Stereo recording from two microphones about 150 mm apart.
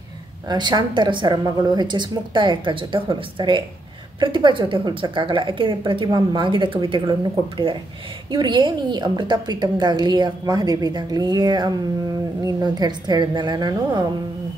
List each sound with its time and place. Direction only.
0.5 s a woman's voice: 30° right (ahead or behind)